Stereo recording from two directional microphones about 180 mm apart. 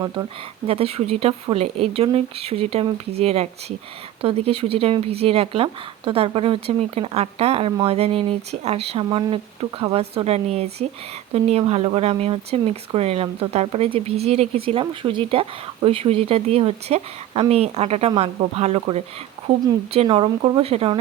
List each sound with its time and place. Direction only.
0.7 s speech: 35° right (ahead or behind)
19.9 s speech: 30° right (ahead or behind)